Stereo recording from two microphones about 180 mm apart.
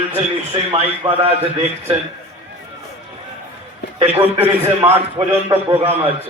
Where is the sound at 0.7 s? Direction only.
15° right (ahead or behind).